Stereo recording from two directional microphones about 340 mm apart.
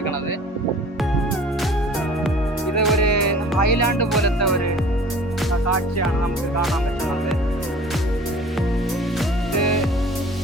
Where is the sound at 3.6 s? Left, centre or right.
Left.